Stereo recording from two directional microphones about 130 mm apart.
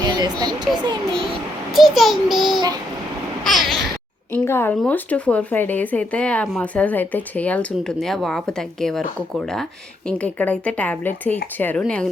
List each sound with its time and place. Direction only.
0.0 s speech: 30° right (ahead or behind)
1.7 s a child's voice: centre (ahead or behind)
3.4 s babbling: centre (ahead or behind)
4.4 s speech: 20° left (ahead or behind)
10.1 s speech: 10° left (ahead or behind)